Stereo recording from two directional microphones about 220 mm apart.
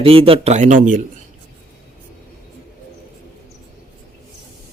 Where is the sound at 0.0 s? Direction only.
25° right (ahead or behind).